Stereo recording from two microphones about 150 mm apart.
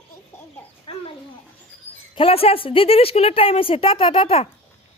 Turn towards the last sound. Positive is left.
turn(degrees=40)  # may be behind; listen again after turning